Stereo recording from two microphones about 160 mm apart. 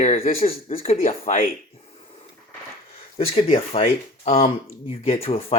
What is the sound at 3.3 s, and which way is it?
Speech, 40° left (ahead or behind).